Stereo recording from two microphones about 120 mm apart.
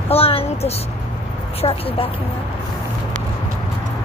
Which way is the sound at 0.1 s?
50° left (ahead or behind).